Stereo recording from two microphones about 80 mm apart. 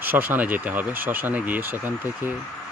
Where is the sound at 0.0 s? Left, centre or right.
Right.